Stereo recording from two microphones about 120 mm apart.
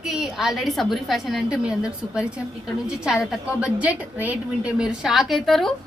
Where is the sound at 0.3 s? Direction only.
Centre (ahead or behind).